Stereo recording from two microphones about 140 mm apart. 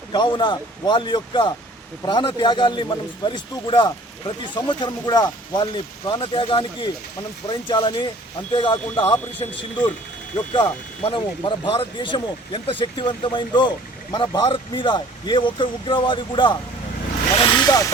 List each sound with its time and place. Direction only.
0.1 s speech: 35° left (ahead or behind)
17.4 s vehicle: 30° left (ahead or behind)